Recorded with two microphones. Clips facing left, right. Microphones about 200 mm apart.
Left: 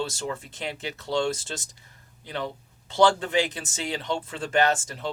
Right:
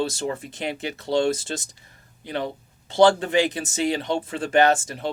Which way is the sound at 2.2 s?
15° right (ahead or behind).